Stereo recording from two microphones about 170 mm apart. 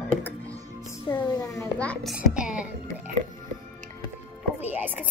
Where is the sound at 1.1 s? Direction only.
10° left (ahead or behind).